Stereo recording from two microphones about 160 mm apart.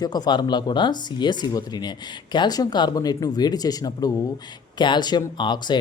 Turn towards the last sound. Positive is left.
turn(degrees=30)  # may be behind; listen again after turning